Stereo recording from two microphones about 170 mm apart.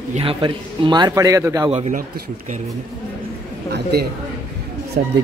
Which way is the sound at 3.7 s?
70° right (ahead or behind).